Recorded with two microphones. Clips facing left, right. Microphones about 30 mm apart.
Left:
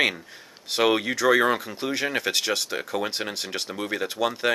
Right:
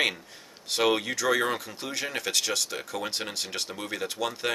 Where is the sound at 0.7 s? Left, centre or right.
Centre.